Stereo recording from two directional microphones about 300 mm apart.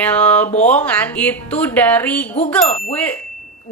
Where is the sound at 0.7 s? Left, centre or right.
Centre.